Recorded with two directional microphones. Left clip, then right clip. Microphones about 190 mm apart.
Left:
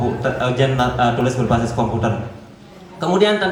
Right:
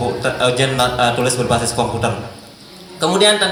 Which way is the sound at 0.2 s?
25° right (ahead or behind).